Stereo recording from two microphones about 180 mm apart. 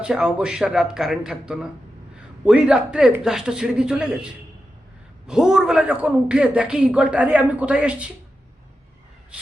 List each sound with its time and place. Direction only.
0.0 s a man's voice: 5° right (ahead or behind)
9.3 s a man's voice: 5° right (ahead or behind)